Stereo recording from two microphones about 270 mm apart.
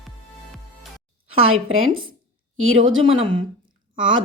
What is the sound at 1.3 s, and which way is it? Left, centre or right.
Speech, right.